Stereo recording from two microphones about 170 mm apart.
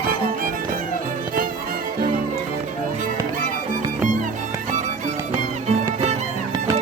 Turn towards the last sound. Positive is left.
turn(degrees=-40)  # may be behind; listen again after turning